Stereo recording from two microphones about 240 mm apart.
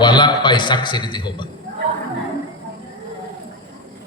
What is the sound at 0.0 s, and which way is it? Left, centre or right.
A man's voice, centre.